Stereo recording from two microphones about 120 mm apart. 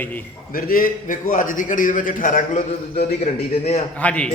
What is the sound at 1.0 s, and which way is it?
A man's voice, 90° left.